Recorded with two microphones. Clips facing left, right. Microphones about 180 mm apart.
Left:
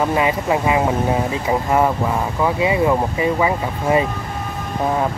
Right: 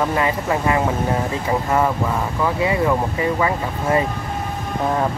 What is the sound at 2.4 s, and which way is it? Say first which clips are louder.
Speech: left 2 dB; 20° left (ahead or behind).